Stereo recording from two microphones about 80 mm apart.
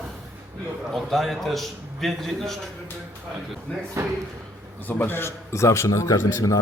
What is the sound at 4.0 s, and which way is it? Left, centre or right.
Speech, right.